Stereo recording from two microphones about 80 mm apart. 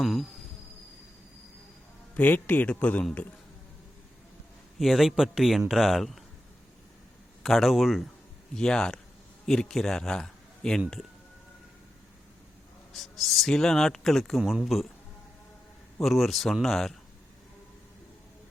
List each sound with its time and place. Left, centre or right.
0.0 s speech: centre
2.1 s speech: left
4.8 s speech: centre
7.4 s a man's voice: centre
12.9 s speech: centre
16.0 s speech: centre